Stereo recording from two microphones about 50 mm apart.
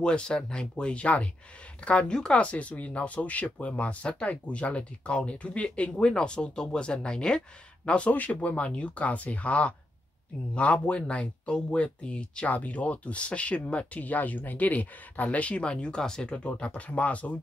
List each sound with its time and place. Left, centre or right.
0.0 s speech: centre
8.1 s speech: left